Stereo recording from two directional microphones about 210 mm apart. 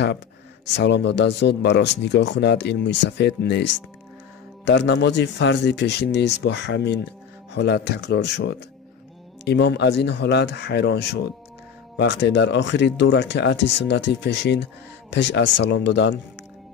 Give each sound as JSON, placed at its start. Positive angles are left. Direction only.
{"t": 0.7, "sound": "speech", "side_deg": 55}
{"t": 4.6, "sound": "speech", "side_deg": 55}